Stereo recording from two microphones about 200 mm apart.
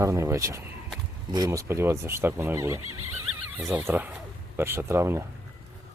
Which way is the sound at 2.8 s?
90° right.